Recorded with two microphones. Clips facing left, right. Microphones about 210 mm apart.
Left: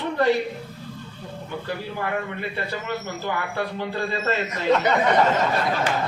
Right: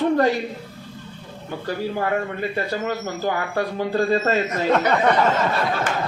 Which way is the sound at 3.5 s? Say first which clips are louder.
Right 5 dB; 45° right (ahead or behind).